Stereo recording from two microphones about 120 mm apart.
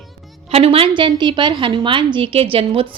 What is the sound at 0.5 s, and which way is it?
A woman's voice, 50° right (ahead or behind).